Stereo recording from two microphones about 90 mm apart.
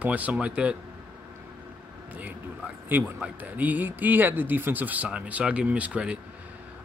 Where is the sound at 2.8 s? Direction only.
20° right (ahead or behind).